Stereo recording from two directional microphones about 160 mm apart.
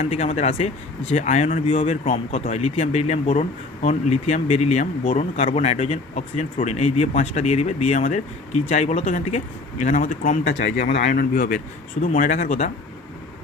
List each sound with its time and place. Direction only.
0.0 s speech: 40° left (ahead or behind)
1.6 s speech: 35° left (ahead or behind)
1.9 s speech: 50° left (ahead or behind)
10.8 s speech: 90° left
11.0 s speech: 65° left (ahead or behind)
12.0 s speech: 55° left (ahead or behind)